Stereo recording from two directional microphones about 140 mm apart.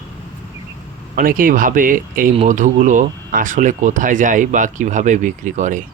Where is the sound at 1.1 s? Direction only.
80° right.